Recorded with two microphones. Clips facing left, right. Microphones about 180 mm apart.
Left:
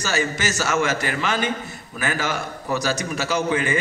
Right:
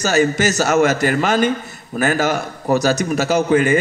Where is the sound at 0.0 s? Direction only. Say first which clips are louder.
Right 8 dB; 40° right (ahead or behind).